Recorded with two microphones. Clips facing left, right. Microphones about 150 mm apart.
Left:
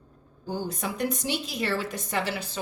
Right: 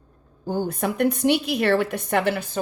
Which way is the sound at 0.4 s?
50° right (ahead or behind).